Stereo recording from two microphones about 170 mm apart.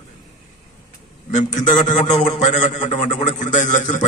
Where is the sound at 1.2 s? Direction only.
45° left (ahead or behind).